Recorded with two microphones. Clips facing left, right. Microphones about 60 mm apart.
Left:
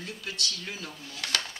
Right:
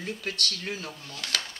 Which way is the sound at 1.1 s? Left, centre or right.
Centre.